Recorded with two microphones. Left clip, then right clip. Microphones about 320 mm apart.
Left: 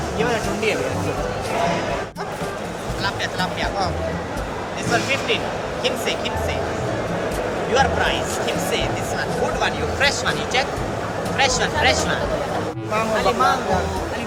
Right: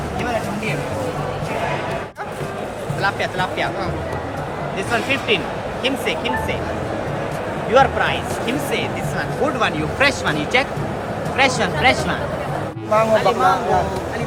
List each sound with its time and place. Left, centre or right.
5.8 s speech: right
7.7 s speech: centre
12.9 s speech: centre